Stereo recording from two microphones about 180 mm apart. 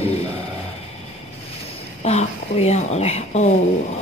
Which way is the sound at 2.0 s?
35° left (ahead or behind).